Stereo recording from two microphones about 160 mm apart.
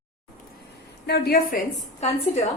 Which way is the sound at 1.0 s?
85° left.